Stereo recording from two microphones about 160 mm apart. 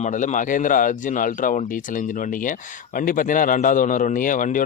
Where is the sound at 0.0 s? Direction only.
50° left (ahead or behind).